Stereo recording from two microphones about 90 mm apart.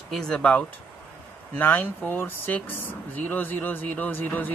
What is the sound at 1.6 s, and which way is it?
Speech, 20° left (ahead or behind).